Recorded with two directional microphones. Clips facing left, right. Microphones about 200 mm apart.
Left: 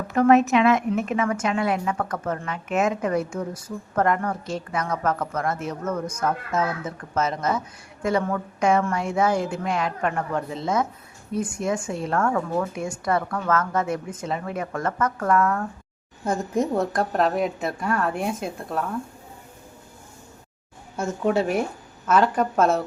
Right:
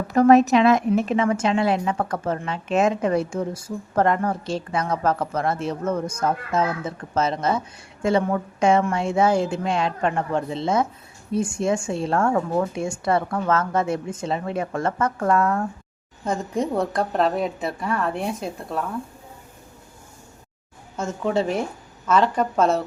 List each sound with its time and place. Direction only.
0.1 s a woman's voice: 35° right (ahead or behind)
16.2 s a woman's voice: 5° left (ahead or behind)
20.9 s a woman's voice: 10° left (ahead or behind)